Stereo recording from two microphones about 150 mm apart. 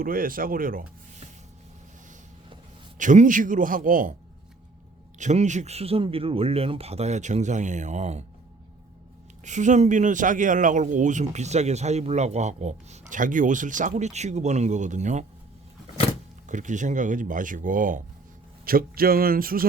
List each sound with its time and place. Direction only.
0.0 s speech: 70° right (ahead or behind)
3.0 s speech: 55° right (ahead or behind)
5.1 s a man's voice: 50° right (ahead or behind)
9.4 s a man's voice: 55° right (ahead or behind)
16.5 s speech: 55° right (ahead or behind)
18.6 s speech: 75° right (ahead or behind)